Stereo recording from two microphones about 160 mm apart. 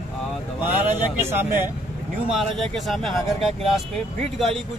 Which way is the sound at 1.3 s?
15° right (ahead or behind).